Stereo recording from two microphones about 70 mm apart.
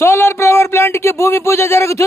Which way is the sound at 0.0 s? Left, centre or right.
Left.